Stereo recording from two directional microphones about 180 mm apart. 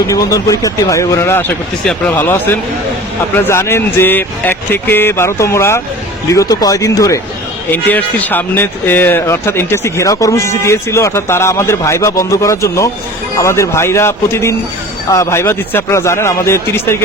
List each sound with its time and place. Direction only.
0.1 s speech: 20° left (ahead or behind)